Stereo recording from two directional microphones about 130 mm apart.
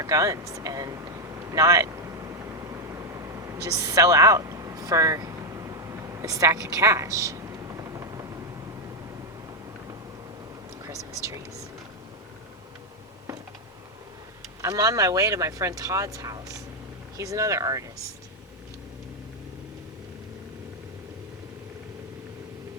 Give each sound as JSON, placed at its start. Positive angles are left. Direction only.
{"t": 0.0, "sound": "speech", "side_deg": -25}
{"t": 2.6, "sound": "a sound", "side_deg": -25}
{"t": 10.8, "sound": "speech", "side_deg": -25}
{"t": 14.6, "sound": "speech", "side_deg": -25}